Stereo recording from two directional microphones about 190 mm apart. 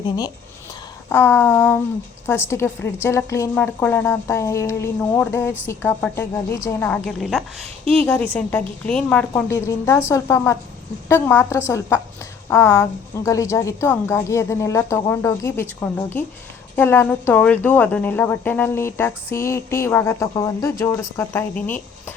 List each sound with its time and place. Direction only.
1.1 s a woman's voice: 10° left (ahead or behind)
7.2 s speech: centre (ahead or behind)
8.0 s a woman's voice: 10° left (ahead or behind)